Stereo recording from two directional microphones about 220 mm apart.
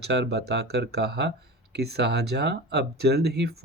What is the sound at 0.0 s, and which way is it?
Speech, 50° right (ahead or behind).